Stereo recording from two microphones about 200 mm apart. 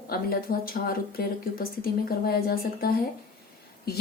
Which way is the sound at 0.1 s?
50° left (ahead or behind).